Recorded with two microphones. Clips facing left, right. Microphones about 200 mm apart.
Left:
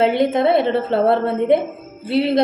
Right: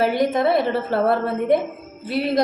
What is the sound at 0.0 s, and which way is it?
A woman's voice, 25° left (ahead or behind).